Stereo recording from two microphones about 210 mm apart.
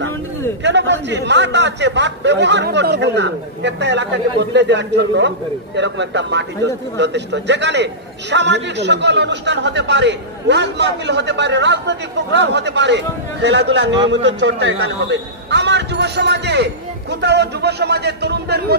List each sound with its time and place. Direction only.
0.7 s a man's voice: 55° right (ahead or behind)